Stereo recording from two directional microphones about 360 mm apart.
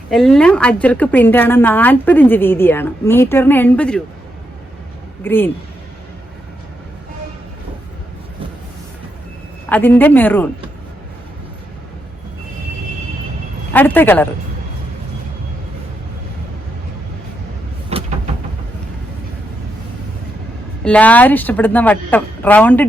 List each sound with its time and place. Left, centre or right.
0.1 s a woman's voice: centre
5.2 s a woman's voice: centre
9.6 s a woman's voice: centre
13.7 s a woman's voice: centre
17.9 s vehicle: centre
20.8 s a woman's voice: centre